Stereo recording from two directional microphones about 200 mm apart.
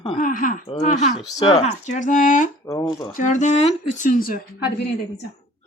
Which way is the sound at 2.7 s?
15° left (ahead or behind).